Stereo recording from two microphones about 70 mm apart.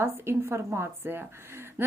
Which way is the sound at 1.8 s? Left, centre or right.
Right.